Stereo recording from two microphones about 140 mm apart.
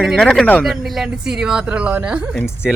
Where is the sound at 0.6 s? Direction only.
5° right (ahead or behind).